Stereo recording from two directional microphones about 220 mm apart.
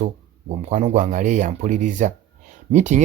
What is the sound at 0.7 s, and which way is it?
Speech, 35° right (ahead or behind).